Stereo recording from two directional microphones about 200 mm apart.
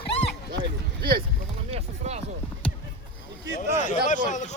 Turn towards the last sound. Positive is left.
turn(degrees=40)  # may be behind; listen again after turning